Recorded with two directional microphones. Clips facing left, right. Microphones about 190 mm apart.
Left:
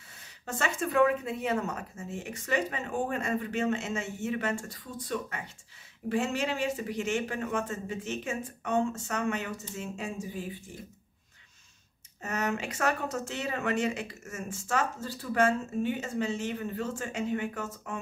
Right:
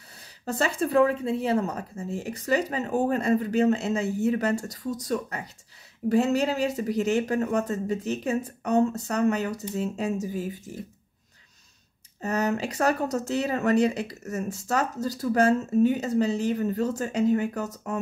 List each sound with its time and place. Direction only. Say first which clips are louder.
0.5 s speech: right 6 dB; 35° right (ahead or behind)
12.2 s speech: right 6 dB; 35° right (ahead or behind)